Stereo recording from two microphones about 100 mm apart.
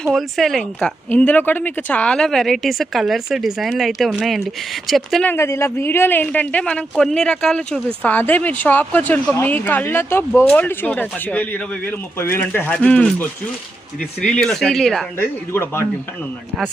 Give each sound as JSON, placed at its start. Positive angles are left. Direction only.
{"t": 0.0, "sound": "speech", "side_deg": 0}
{"t": 5.2, "sound": "speech", "side_deg": 25}
{"t": 15.2, "sound": "speech", "side_deg": 25}